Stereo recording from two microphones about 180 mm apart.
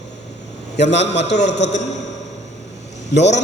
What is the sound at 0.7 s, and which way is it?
Speech, 75° left (ahead or behind).